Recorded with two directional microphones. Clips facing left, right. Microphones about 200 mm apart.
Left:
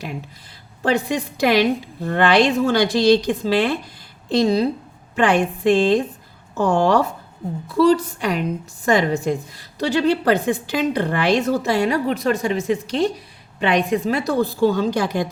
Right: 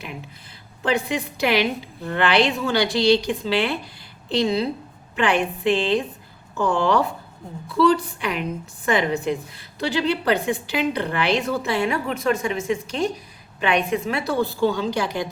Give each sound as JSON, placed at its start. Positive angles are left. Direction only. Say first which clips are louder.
{"t": 0.8, "sound": "a woman's voice", "louder": "left 3 dB", "side_deg": 45}